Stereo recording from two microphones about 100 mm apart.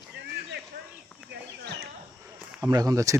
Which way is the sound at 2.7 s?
35° right (ahead or behind).